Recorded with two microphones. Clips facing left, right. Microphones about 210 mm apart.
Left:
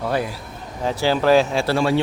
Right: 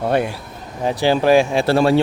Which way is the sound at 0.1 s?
65° right (ahead or behind).